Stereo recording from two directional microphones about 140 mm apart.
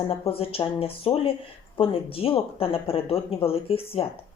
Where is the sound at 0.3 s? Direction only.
40° left (ahead or behind).